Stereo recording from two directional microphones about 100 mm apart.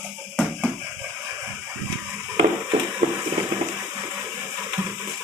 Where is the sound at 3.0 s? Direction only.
90° right.